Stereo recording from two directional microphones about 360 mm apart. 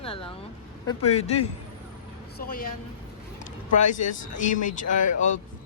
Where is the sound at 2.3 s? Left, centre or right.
Left.